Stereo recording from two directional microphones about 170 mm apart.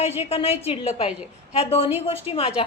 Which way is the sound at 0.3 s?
35° left (ahead or behind).